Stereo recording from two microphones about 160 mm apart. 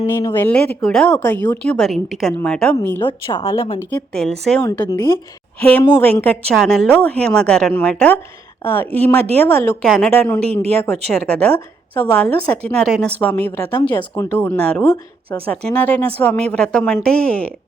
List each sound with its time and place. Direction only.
0.0 s speech: 20° left (ahead or behind)
0.3 s a woman's voice: 10° left (ahead or behind)
3.0 s a woman's voice: 30° left (ahead or behind)
3.8 s a woman's voice: 5° left (ahead or behind)
13.8 s a woman's voice: 25° left (ahead or behind); by 17.5 s 5° left (ahead or behind)